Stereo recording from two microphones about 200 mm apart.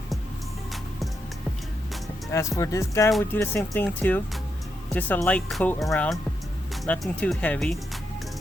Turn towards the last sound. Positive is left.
turn(degrees=5)  # may be behind; listen again after turning